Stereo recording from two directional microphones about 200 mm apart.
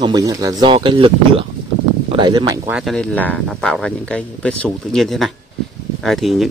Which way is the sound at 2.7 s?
Centre (ahead or behind).